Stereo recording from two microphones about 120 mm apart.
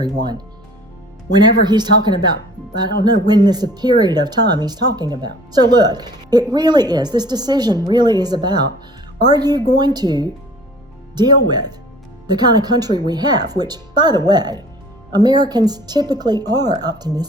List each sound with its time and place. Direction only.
0.0 s speech: 35° right (ahead or behind)